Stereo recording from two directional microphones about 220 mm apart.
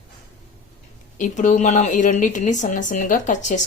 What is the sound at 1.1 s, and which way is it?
Speech, 35° left (ahead or behind).